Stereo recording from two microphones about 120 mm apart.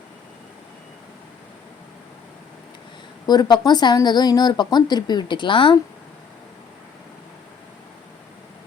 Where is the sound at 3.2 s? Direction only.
35° left (ahead or behind).